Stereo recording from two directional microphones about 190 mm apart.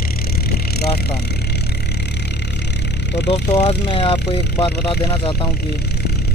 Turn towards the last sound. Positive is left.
turn(degrees=25)  # may be behind; listen again after turning